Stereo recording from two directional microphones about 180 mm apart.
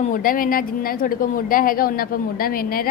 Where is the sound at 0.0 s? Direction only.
50° left (ahead or behind).